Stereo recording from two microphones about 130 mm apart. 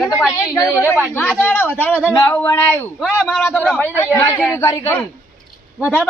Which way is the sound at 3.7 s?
15° left (ahead or behind).